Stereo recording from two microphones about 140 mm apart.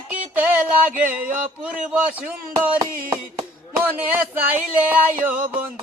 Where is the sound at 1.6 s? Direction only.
5° right (ahead or behind).